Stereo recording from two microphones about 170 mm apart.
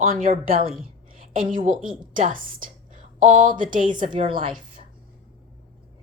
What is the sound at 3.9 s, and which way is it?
Speech, 30° right (ahead or behind).